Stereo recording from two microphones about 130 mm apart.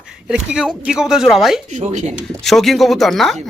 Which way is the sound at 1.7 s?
70° right (ahead or behind).